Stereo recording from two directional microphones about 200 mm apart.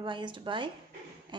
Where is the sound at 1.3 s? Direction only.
20° right (ahead or behind).